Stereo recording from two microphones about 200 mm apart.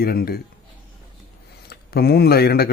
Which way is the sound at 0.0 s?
50° left (ahead or behind).